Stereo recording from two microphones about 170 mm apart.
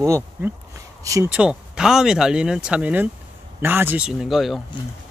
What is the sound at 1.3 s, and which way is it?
Speech, 5° right (ahead or behind).